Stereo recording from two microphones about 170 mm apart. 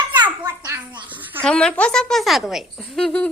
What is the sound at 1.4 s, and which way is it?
Speech, 5° left (ahead or behind).